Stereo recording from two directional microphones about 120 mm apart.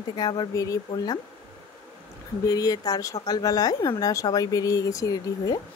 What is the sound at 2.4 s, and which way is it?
Speech, 30° left (ahead or behind).